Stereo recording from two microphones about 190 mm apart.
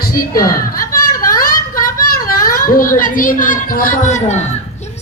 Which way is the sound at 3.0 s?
45° left (ahead or behind).